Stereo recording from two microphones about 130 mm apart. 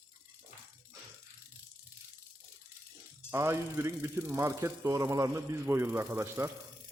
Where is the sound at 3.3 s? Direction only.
20° right (ahead or behind).